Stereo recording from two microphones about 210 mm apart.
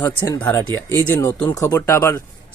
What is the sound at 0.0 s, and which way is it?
Speech, 15° left (ahead or behind).